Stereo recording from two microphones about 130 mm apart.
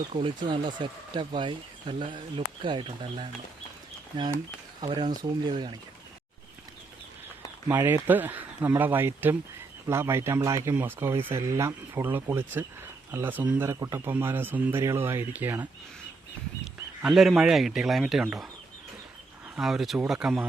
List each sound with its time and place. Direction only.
0.1 s speech: 40° right (ahead or behind)
7.7 s speech: 20° right (ahead or behind)
17.0 s speech: centre (ahead or behind)
19.5 s speech: 5° right (ahead or behind)